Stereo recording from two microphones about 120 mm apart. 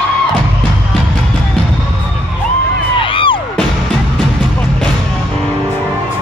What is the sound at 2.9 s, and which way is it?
Music, 45° left (ahead or behind).